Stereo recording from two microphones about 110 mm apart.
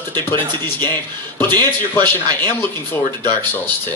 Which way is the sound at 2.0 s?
20° left (ahead or behind).